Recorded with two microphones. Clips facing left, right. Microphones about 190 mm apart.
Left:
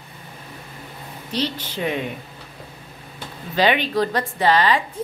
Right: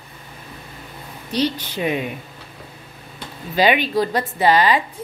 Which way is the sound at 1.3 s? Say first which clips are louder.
Right 4 dB; 15° right (ahead or behind).